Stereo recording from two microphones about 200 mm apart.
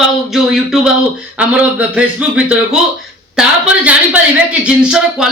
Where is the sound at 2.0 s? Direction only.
5° right (ahead or behind).